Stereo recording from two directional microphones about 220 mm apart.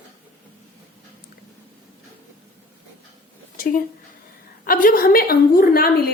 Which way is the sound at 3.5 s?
40° left (ahead or behind).